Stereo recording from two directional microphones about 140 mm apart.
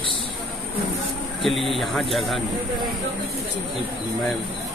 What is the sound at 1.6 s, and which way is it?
Speech, centre (ahead or behind).